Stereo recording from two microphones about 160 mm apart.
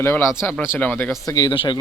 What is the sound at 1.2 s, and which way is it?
Speech, 25° left (ahead or behind).